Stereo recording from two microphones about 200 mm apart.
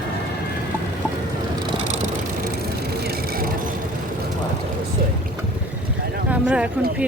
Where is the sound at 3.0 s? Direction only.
50° right (ahead or behind).